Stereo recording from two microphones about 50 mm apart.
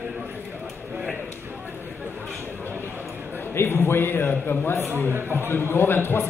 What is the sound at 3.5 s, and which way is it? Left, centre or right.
A man's voice, left.